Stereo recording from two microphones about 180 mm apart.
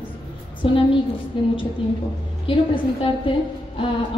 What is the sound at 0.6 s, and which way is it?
A woman's voice, 30° left (ahead or behind).